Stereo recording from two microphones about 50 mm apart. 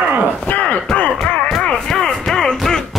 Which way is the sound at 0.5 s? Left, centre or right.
Left.